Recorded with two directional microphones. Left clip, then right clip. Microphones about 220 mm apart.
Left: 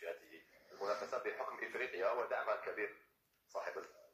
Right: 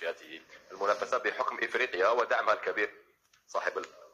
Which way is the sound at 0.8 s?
35° right (ahead or behind).